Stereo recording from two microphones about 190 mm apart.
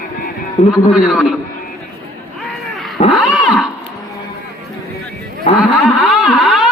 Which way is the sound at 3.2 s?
5° right (ahead or behind).